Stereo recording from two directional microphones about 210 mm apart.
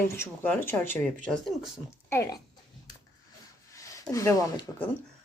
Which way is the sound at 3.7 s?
15° left (ahead or behind).